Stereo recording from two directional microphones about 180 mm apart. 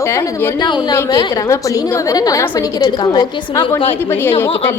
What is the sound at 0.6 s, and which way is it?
A woman's voice, 25° left (ahead or behind).